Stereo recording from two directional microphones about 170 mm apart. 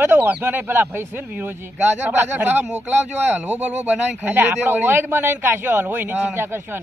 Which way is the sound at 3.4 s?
40° right (ahead or behind).